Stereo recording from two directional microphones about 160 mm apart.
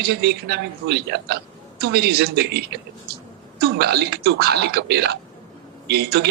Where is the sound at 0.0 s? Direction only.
85° right.